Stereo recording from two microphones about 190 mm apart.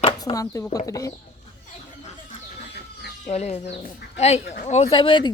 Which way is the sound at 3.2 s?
35° left (ahead or behind).